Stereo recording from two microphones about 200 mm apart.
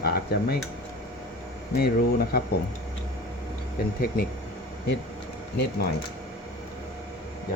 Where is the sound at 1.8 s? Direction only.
50° left (ahead or behind).